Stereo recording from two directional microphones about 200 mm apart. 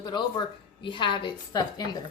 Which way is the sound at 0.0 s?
20° left (ahead or behind).